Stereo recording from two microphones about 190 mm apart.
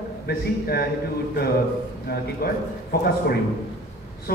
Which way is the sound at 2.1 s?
55° left (ahead or behind).